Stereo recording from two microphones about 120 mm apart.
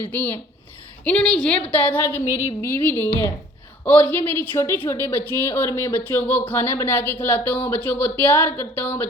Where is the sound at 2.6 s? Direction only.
20° left (ahead or behind).